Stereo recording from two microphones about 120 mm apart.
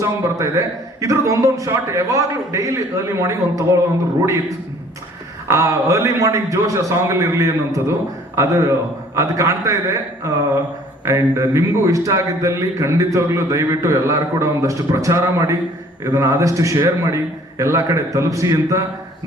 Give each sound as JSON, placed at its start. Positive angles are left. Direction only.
{"t": 0.0, "sound": "a man's voice", "side_deg": -25}
{"t": 5.5, "sound": "a man's voice", "side_deg": -25}